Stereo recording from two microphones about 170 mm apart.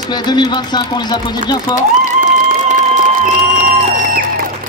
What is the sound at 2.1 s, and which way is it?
Music, 45° right (ahead or behind).